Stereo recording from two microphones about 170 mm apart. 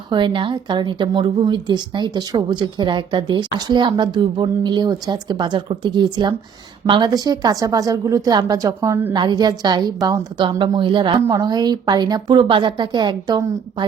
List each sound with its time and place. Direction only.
0.1 s a woman's voice: 25° right (ahead or behind)
9.1 s a woman's voice: 25° right (ahead or behind)